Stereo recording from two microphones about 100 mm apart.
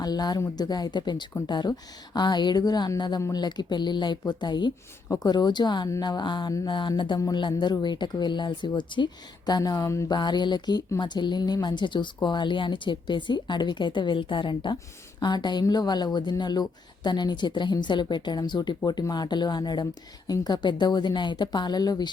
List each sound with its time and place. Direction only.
0.0 s a woman's voice: 40° left (ahead or behind)
5.0 s a woman's voice: 35° left (ahead or behind)
9.5 s speech: 40° left (ahead or behind)
10.1 s a woman's voice: 45° left (ahead or behind)